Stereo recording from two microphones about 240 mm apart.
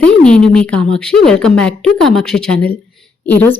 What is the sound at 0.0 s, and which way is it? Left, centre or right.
A woman's voice, centre.